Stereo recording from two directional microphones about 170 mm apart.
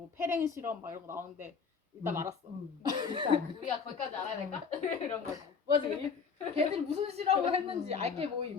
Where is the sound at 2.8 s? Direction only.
25° right (ahead or behind).